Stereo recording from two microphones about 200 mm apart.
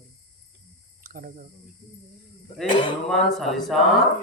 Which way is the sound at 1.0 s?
45° right (ahead or behind).